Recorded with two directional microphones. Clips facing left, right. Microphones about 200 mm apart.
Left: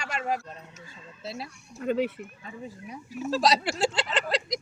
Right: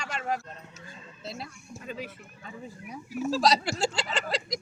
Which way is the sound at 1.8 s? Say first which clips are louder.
Left 12 dB; 65° left (ahead or behind).